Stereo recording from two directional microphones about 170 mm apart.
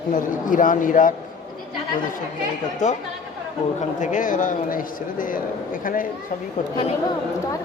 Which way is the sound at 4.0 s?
50° left (ahead or behind).